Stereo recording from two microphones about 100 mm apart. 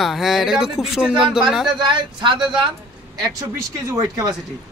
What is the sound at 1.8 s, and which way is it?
Speech, 50° right (ahead or behind).